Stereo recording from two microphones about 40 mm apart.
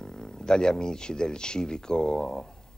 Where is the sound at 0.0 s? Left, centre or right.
Centre.